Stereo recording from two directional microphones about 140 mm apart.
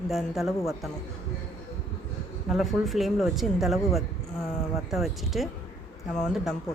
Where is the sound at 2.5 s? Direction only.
Centre (ahead or behind).